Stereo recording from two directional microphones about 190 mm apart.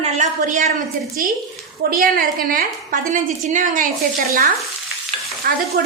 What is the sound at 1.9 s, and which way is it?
A woman's voice, 50° right (ahead or behind).